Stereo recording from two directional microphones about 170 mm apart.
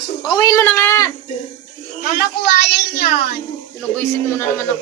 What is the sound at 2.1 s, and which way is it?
A child's voice, 70° left (ahead or behind).